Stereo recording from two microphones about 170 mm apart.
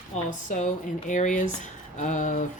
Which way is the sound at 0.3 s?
45° left (ahead or behind).